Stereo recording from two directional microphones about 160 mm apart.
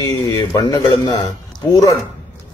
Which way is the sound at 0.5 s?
25° left (ahead or behind).